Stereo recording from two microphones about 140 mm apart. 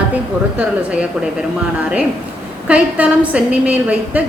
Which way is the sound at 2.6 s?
10° right (ahead or behind).